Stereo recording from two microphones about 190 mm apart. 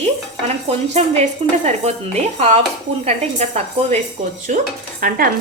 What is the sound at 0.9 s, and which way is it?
Dishes, 35° right (ahead or behind).